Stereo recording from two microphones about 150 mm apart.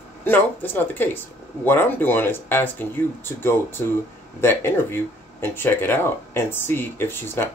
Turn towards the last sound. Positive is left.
turn(degrees=15)  # may be behind; listen again after turning